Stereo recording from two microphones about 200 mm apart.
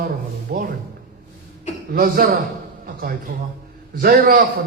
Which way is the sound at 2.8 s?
45° right (ahead or behind).